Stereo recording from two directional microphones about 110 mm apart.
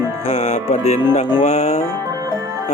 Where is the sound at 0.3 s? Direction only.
85° left.